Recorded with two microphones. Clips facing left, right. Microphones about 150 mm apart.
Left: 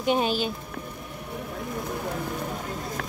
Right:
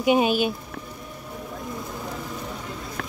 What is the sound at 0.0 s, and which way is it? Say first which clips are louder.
Speech: right 4 dB; 10° right (ahead or behind).